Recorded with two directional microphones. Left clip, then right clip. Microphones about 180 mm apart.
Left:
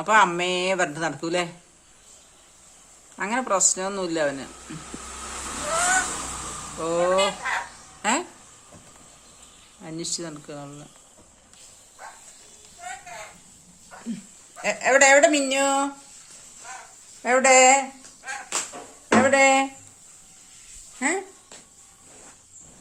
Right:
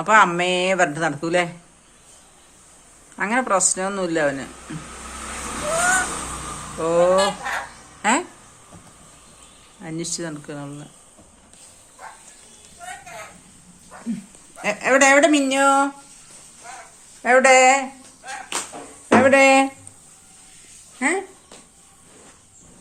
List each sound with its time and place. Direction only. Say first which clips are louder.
0.0 s speech: right 4 dB; centre (ahead or behind)
3.2 s speech: right 4 dB; centre (ahead or behind)
6.7 s speech: right 5 dB; centre (ahead or behind)
9.8 s speech: right 3 dB; centre (ahead or behind)
14.6 s speech: right 2 dB; centre (ahead or behind)
17.2 s speech: right 3 dB; 5° left (ahead or behind)
19.0 s a sound: right 4 dB; 20° right (ahead or behind)
21.0 s speech: right 4 dB; 10° left (ahead or behind)